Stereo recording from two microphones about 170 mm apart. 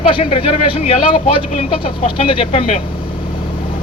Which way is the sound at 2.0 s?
30° left (ahead or behind).